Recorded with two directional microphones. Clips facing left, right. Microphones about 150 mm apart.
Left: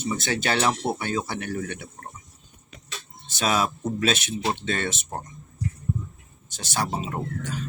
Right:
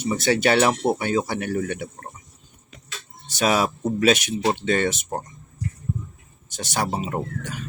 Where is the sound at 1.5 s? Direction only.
55° right (ahead or behind).